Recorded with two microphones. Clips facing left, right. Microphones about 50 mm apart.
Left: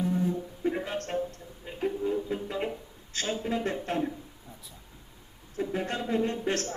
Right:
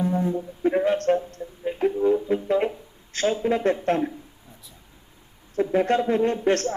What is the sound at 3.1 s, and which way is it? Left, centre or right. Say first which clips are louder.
Speech: right 8 dB; right.